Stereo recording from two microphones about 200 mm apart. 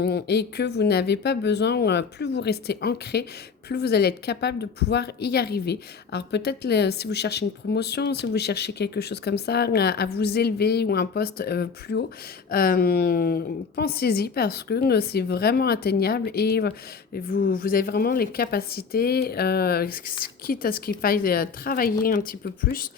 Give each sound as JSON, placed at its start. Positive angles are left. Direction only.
{"t": 0.0, "sound": "a woman's voice", "side_deg": 55}